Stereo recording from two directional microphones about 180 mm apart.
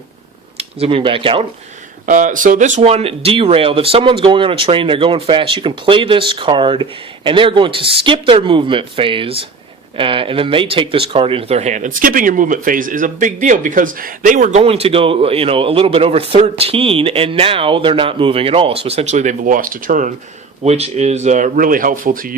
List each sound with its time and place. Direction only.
0.5 s speech: 30° right (ahead or behind)
2.0 s speech: 45° right (ahead or behind)